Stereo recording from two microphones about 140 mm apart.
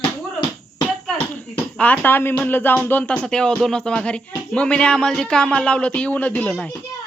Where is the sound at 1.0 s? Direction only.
5° left (ahead or behind).